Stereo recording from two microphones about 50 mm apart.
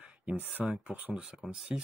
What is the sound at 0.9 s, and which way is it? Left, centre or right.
Speech, right.